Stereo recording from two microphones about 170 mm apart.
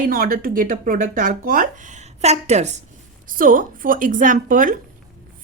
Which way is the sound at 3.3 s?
55° right (ahead or behind).